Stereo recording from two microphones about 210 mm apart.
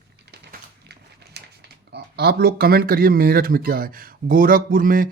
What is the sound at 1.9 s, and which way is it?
Speech, 50° right (ahead or behind).